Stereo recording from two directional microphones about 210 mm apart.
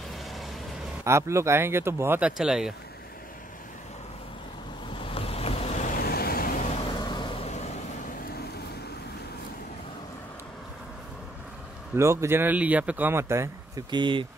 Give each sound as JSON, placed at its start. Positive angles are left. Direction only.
{"t": 1.0, "sound": "speech", "side_deg": -15}
{"t": 5.0, "sound": "boat", "side_deg": 25}
{"t": 11.9, "sound": "speech", "side_deg": -15}